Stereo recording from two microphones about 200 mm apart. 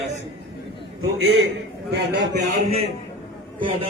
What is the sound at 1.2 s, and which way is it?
Speech, 60° right (ahead or behind).